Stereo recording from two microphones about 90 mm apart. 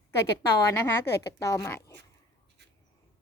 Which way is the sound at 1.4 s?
35° left (ahead or behind).